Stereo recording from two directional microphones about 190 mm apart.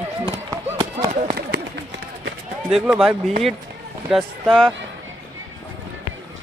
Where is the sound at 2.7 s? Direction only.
Centre (ahead or behind).